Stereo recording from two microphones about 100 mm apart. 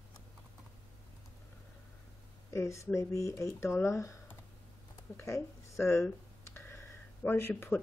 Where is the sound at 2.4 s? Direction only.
30° left (ahead or behind).